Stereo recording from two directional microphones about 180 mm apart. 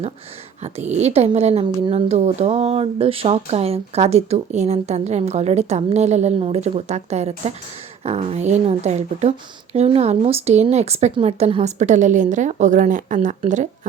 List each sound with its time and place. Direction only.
0.6 s a woman's voice: 40° right (ahead or behind)